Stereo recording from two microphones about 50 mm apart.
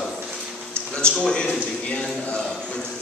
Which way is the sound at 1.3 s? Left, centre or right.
Centre.